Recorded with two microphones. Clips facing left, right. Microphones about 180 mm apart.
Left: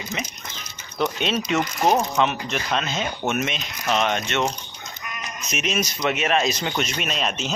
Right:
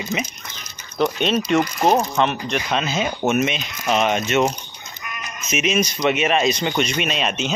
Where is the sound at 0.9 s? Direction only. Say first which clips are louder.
Right 4 dB; centre (ahead or behind).